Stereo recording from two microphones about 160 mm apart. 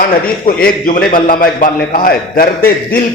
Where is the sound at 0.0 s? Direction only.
65° left (ahead or behind).